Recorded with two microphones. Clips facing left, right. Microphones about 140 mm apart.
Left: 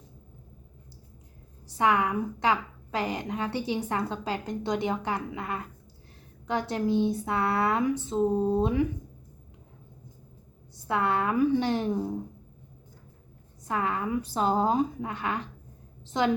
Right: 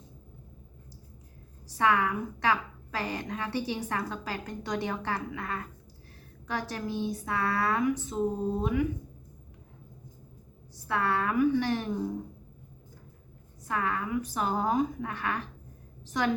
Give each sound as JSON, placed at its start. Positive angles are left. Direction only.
{"t": 1.7, "sound": "a woman's voice", "side_deg": 20}
{"t": 10.8, "sound": "a woman's voice", "side_deg": 20}
{"t": 13.7, "sound": "a woman's voice", "side_deg": 20}